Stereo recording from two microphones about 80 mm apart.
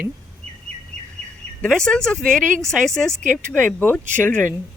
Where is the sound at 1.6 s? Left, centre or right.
Centre.